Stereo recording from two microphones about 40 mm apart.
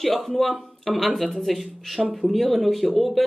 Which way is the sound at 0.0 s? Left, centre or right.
Centre.